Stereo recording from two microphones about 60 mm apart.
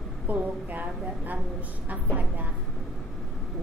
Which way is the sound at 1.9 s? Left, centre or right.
Right.